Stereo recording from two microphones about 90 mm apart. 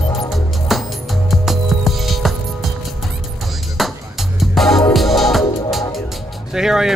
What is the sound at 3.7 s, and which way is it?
Music, centre (ahead or behind).